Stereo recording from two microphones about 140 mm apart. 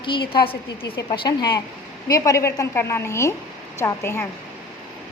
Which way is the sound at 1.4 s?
30° left (ahead or behind).